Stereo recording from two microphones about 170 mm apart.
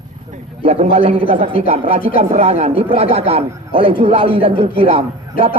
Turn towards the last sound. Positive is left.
turn(degrees=-30)  # may be behind; listen again after turning